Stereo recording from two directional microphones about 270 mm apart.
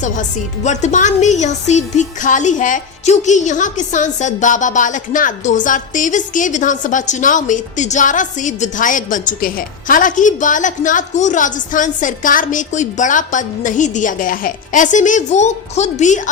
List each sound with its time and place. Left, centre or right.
0.0 s speech: left